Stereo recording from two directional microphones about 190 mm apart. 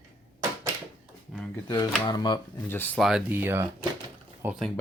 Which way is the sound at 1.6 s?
20° left (ahead or behind).